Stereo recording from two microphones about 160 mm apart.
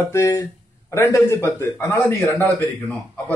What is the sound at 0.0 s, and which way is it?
Speech, 15° left (ahead or behind).